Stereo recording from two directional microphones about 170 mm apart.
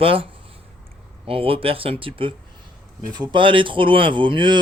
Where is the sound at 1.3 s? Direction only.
35° right (ahead or behind).